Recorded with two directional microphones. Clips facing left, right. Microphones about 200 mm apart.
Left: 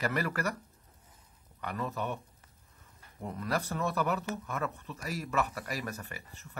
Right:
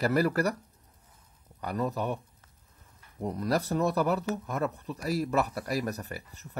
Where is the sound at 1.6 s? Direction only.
40° right (ahead or behind).